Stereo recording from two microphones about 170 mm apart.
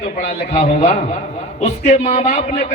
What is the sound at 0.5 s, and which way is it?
A man's voice, 40° left (ahead or behind).